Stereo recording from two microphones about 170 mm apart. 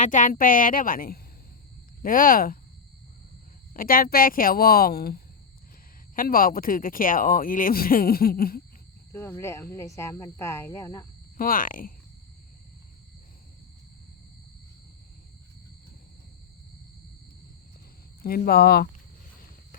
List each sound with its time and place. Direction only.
0.0 s a woman's voice: 50° left (ahead or behind)
3.8 s speech: 60° left (ahead or behind)
9.1 s speech: 15° left (ahead or behind)
11.3 s speech: 55° left (ahead or behind)
18.2 s speech: 60° left (ahead or behind)